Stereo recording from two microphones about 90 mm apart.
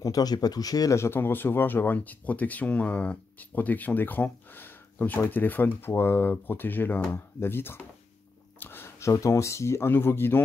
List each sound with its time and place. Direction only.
0.0 s speech: 45° left (ahead or behind)
0.9 s speech: 30° left (ahead or behind)
8.5 s a sound: 25° left (ahead or behind)
9.1 s speech: 35° left (ahead or behind)